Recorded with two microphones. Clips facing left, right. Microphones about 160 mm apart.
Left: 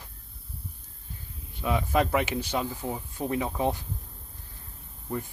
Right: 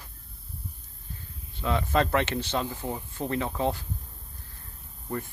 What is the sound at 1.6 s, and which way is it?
Speech, 10° left (ahead or behind).